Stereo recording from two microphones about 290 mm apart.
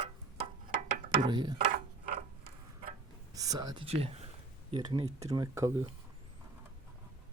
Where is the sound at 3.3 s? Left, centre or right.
Centre.